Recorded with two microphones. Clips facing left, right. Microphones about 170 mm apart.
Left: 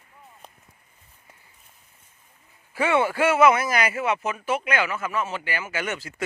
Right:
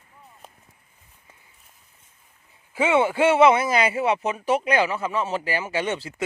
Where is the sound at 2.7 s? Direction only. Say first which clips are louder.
Right 2 dB; 20° right (ahead or behind).